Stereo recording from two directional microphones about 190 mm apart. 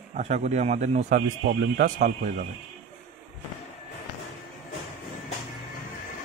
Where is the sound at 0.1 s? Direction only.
35° right (ahead or behind).